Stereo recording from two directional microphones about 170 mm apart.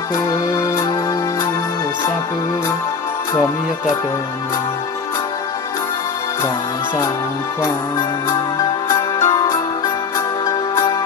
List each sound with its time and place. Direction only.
8.3 s music: 20° left (ahead or behind)